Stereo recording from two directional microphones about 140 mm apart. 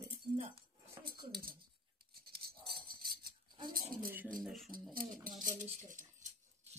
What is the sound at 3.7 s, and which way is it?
Speech, 90° right.